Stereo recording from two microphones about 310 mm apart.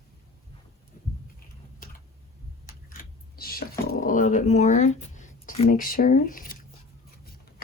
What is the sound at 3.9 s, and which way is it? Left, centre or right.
Speech, left.